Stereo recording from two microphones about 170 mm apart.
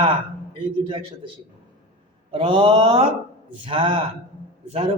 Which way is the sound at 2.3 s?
30° right (ahead or behind).